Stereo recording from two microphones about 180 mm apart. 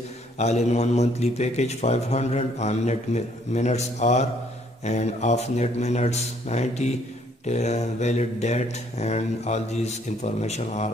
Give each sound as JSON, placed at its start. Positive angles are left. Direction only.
{"t": 0.4, "sound": "a man's voice", "side_deg": 40}